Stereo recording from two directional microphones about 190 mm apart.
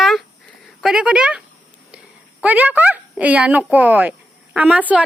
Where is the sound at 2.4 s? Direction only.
10° right (ahead or behind).